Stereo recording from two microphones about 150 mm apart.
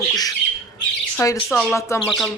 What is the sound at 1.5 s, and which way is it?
Speech, 5° left (ahead or behind).